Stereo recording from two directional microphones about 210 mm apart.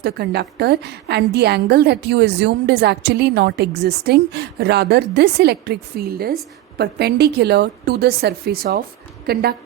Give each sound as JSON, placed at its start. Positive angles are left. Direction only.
{"t": 0.0, "sound": "a woman's voice", "side_deg": -50}